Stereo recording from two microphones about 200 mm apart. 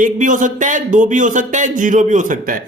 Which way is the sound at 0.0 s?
40° right (ahead or behind).